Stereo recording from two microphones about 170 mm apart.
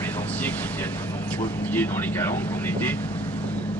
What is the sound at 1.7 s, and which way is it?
Speech, 10° left (ahead or behind).